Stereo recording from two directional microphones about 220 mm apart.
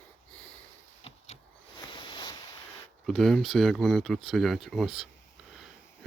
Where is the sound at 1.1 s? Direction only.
30° left (ahead or behind).